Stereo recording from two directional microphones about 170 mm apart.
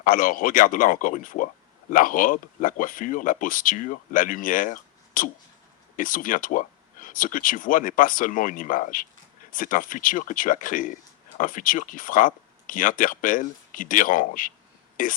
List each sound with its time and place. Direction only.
0.0 s speech: 55° left (ahead or behind)